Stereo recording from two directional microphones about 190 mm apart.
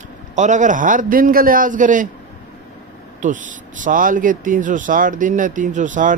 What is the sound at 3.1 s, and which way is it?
Speech, 40° right (ahead or behind).